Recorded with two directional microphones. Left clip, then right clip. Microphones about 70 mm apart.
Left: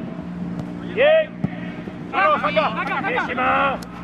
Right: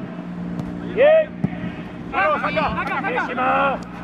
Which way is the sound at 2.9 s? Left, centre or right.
Left.